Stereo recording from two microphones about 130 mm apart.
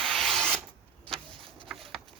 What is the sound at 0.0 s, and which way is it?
Rub, 5° left (ahead or behind).